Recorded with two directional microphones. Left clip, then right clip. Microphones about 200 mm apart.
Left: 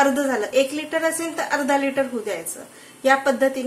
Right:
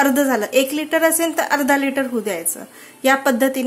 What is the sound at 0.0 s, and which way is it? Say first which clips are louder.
A woman's voice: right 3 dB; 50° right (ahead or behind).